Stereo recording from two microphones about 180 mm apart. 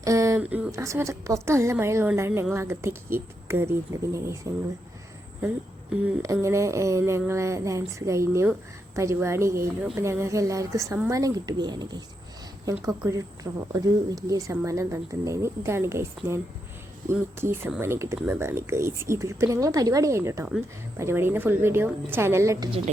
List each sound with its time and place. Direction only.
0.0 s a woman's voice: 20° right (ahead or behind)
6.2 s a woman's voice: 15° right (ahead or behind)